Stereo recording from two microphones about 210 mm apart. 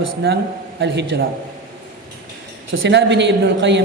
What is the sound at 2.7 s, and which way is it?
A man's voice, 55° right (ahead or behind).